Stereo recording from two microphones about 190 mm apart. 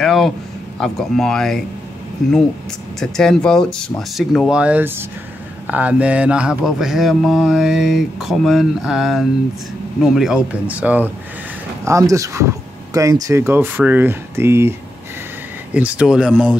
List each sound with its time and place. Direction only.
0.0 s speech: centre (ahead or behind)
3.0 s speech: 5° left (ahead or behind)